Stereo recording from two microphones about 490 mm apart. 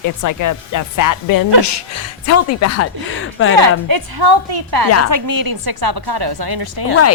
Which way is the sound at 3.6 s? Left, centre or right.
Right.